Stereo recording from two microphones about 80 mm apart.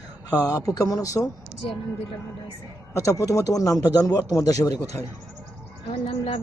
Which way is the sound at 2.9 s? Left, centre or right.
Left.